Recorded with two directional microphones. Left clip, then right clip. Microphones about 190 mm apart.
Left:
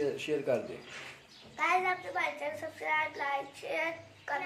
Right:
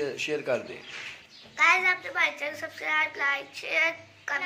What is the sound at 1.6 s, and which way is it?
A child's voice, 20° left (ahead or behind).